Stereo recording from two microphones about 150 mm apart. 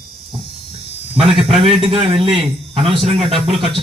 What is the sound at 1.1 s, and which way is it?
Speech, 40° right (ahead or behind).